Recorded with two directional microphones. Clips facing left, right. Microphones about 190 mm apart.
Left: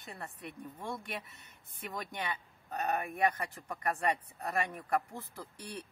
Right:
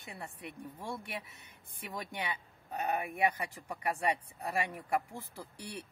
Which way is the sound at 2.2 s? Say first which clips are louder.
Even; 10° right (ahead or behind).